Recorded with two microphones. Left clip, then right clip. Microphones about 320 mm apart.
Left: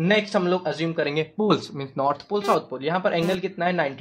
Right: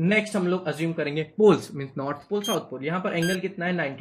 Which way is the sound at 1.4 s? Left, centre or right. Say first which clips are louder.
Right 7 dB; centre.